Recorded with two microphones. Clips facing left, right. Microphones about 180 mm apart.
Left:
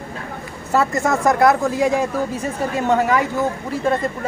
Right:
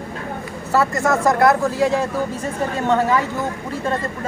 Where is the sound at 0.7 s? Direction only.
20° left (ahead or behind).